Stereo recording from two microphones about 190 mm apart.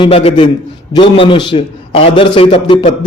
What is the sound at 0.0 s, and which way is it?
A man's voice, 30° left (ahead or behind).